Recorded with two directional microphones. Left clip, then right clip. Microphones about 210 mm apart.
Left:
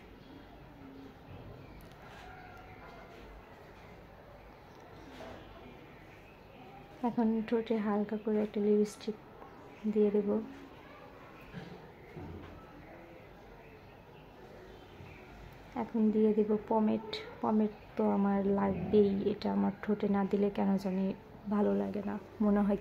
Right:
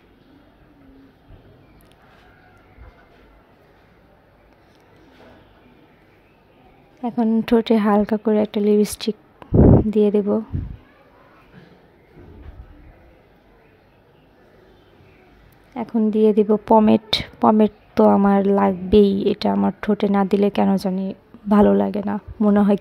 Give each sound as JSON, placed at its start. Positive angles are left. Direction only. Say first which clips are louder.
{"t": 7.0, "sound": "a woman's voice", "louder": "right 10 dB", "side_deg": -30}
{"t": 7.4, "sound": "a woman's voice", "louder": "right 15 dB", "side_deg": -50}
{"t": 15.7, "sound": "a woman's voice", "louder": "right 11 dB", "side_deg": -40}